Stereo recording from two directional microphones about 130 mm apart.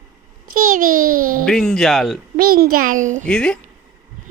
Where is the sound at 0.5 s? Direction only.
90° right.